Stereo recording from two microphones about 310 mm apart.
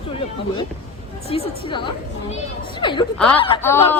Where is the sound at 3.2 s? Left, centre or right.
Centre.